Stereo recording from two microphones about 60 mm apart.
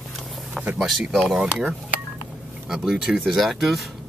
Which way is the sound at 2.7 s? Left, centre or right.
Centre.